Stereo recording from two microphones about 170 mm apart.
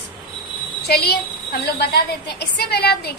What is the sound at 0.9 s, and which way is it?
A woman's voice, 70° left (ahead or behind).